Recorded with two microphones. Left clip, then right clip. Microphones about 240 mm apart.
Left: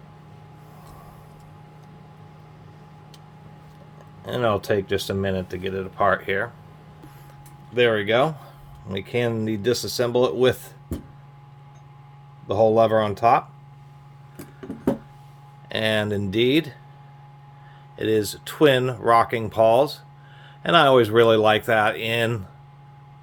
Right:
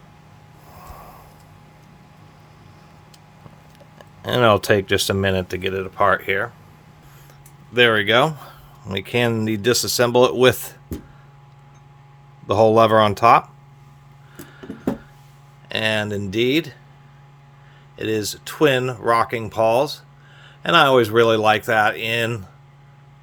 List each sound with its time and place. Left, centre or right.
3.9 s speech: right
7.7 s speech: right
12.5 s speech: right
15.7 s speech: centre
17.9 s speech: centre